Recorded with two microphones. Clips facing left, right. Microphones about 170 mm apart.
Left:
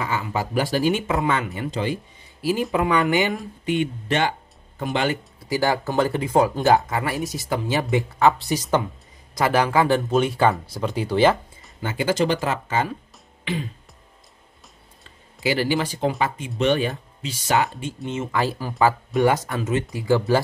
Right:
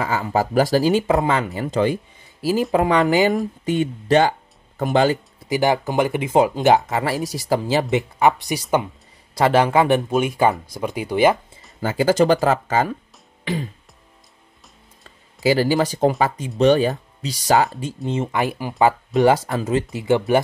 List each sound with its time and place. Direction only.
0.0 s speech: 40° right (ahead or behind)
5.5 s speech: 20° right (ahead or behind)
7.9 s speech: 20° right (ahead or behind)
9.3 s speech: 25° right (ahead or behind)
11.8 s speech: 40° right (ahead or behind)
13.4 s music: 40° right (ahead or behind)
15.4 s speech: 40° right (ahead or behind)
18.3 s speech: 15° right (ahead or behind)